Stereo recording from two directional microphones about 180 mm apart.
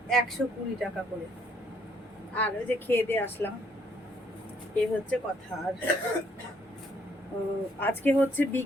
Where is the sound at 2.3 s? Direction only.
10° left (ahead or behind).